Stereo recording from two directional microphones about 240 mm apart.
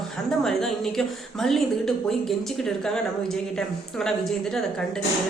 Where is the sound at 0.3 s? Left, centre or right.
Centre.